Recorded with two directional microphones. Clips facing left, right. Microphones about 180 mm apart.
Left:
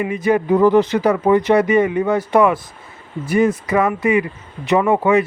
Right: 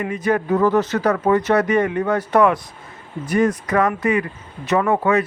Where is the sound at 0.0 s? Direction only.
10° left (ahead or behind).